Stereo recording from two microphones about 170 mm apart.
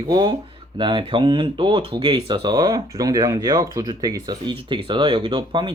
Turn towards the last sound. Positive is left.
turn(degrees=-30)  # may be behind; listen again after turning